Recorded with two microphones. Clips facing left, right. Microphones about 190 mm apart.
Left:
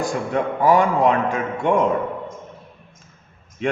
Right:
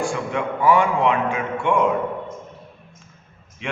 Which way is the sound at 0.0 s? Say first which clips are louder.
Left 2 dB; 40° left (ahead or behind).